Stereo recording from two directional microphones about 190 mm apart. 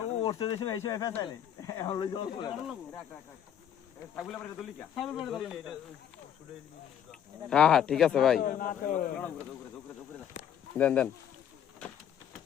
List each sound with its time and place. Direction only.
0.2 s speech: 20° left (ahead or behind)
2.6 s speech: 5° left (ahead or behind)
4.1 s speech: 10° left (ahead or behind)
7.1 s speech: 5° left (ahead or behind)
8.4 s speech: 45° left (ahead or behind)
10.8 s speech: 5° left (ahead or behind)